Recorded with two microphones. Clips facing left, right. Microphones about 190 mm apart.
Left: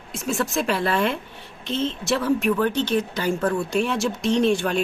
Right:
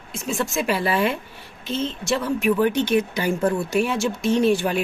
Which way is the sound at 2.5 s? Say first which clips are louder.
Right 2 dB; 15° right (ahead or behind).